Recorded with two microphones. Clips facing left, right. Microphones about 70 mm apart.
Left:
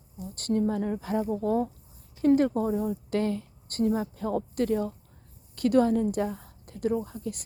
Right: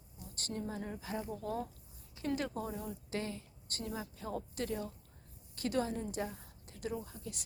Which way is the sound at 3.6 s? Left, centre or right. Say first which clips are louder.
Left 15 dB; left.